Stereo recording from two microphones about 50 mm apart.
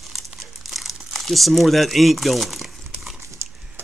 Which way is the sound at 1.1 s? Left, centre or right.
Centre.